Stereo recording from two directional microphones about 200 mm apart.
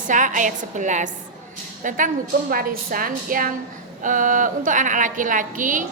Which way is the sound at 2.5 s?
45° right (ahead or behind).